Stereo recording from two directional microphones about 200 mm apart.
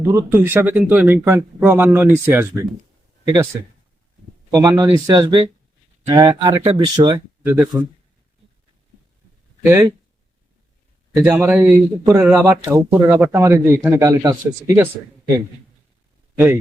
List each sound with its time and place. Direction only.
0.0 s speech: 15° right (ahead or behind)
4.5 s speech: 15° right (ahead or behind)
7.6 s speech: 5° right (ahead or behind)
9.6 s speech: 15° right (ahead or behind)
11.2 s speech: 10° right (ahead or behind)